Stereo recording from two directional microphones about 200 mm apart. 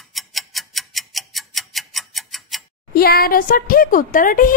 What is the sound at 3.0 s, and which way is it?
A woman's voice, 50° left (ahead or behind).